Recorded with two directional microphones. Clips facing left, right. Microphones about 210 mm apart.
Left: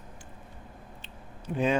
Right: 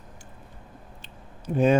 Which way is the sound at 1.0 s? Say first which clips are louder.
Right 3 dB; 40° right (ahead or behind).